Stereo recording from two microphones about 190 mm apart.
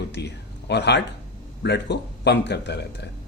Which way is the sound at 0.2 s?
60° left (ahead or behind).